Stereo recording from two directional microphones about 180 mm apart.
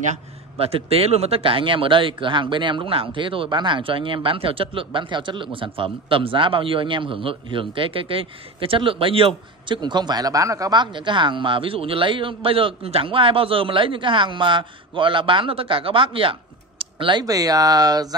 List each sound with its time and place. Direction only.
0.1 s speech: 30° right (ahead or behind)